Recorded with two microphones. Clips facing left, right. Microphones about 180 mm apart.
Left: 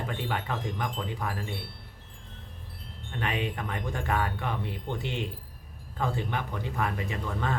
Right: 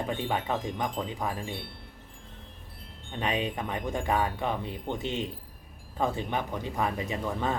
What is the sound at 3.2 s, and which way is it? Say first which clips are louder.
Speech: right 2 dB; 20° right (ahead or behind).